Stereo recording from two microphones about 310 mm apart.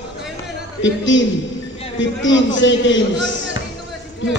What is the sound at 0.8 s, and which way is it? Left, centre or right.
A man's voice, left.